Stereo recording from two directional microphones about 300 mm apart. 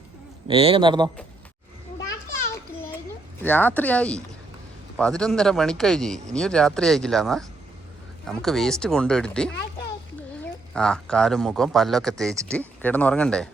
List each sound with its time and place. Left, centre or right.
0.4 s a man's voice: centre
3.4 s a man's voice: centre
10.8 s a man's voice: centre